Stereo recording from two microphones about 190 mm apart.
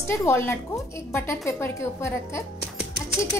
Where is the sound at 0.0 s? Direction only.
15° left (ahead or behind).